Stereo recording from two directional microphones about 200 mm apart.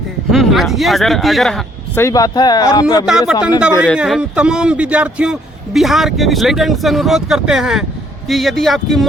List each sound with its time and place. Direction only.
0.3 s a man's voice: centre (ahead or behind)
2.0 s speech: 15° left (ahead or behind)
3.1 s a man's voice: centre (ahead or behind)